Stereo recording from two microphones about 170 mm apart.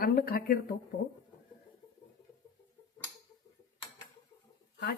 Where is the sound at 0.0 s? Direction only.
65° left (ahead or behind).